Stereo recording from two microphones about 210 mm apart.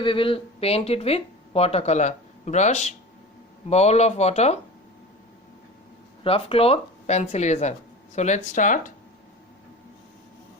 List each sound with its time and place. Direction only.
0.0 s speech: 25° left (ahead or behind)
6.2 s speech: 25° left (ahead or behind)